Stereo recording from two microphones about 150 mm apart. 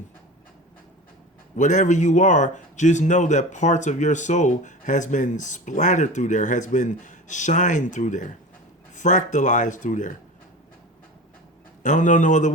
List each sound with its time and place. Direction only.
1.5 s speech: 55° left (ahead or behind)
11.8 s speech: 55° left (ahead or behind)